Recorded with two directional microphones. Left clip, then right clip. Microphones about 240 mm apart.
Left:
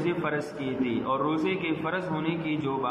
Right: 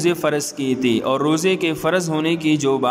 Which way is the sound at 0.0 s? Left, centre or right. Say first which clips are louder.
Right 9 dB; right.